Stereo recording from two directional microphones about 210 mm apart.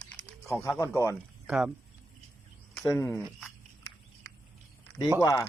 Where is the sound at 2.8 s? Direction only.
10° left (ahead or behind).